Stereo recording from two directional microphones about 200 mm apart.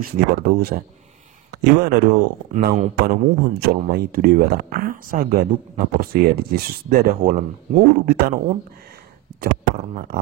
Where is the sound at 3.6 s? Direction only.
45° right (ahead or behind).